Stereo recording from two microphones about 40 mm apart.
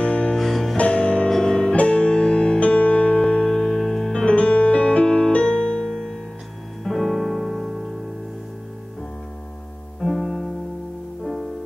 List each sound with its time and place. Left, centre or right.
0.0 s music: left
0.4 s music: centre
0.7 s music: left
1.3 s music: centre
2.6 s music: left; by 4.3 s centre
4.3 s music: left
6.8 s music: centre
10.0 s music: centre